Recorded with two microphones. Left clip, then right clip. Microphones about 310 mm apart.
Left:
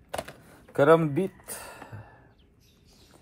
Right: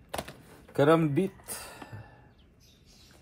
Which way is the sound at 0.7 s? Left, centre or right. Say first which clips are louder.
Left 3 dB; centre.